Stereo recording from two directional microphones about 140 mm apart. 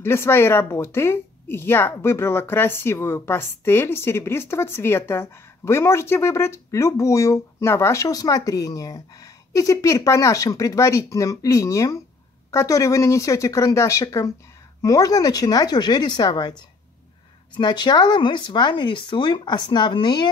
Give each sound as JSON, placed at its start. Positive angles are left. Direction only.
{"t": 0.0, "sound": "speech", "side_deg": 20}